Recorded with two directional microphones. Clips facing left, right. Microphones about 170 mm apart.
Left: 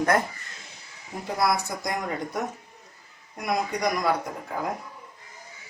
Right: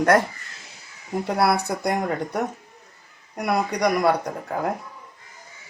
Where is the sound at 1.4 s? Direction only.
65° right (ahead or behind).